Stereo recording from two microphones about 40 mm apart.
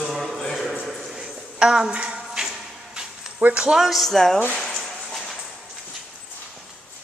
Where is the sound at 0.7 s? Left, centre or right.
Centre.